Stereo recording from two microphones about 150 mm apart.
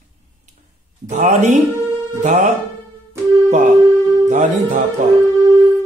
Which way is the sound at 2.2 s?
55° right (ahead or behind).